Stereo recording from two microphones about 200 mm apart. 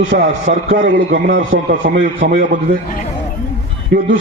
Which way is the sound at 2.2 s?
65° right (ahead or behind).